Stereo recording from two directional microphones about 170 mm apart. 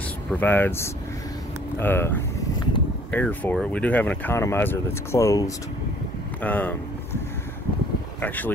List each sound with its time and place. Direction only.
0.3 s speech: 10° left (ahead or behind)
8.2 s speech: 10° left (ahead or behind)